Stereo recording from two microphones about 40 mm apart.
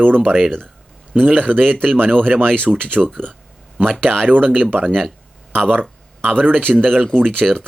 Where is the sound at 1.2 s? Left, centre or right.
Right.